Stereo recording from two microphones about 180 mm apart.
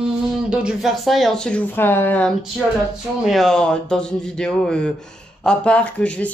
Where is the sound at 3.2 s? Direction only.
Centre (ahead or behind).